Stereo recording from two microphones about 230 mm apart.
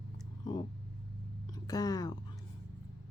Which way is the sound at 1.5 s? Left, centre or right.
Centre.